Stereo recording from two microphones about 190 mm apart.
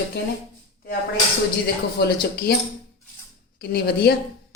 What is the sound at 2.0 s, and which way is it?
Speech, 60° left (ahead or behind).